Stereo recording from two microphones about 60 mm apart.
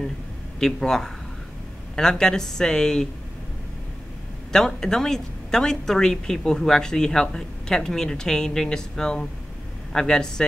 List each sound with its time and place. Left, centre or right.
0.6 s a woman's voice: centre
4.5 s a woman's voice: centre